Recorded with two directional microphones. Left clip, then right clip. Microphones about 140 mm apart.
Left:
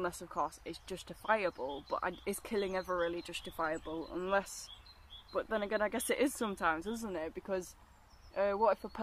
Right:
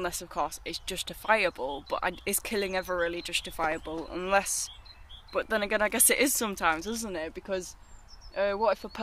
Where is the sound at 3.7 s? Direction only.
Centre (ahead or behind).